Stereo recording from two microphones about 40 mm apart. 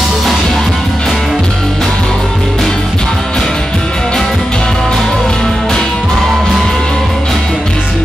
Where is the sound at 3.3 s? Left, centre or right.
Centre.